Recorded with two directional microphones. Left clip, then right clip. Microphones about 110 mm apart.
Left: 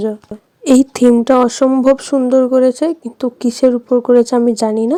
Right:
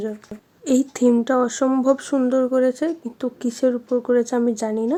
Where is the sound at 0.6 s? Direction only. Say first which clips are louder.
Left 8 dB; 65° left (ahead or behind).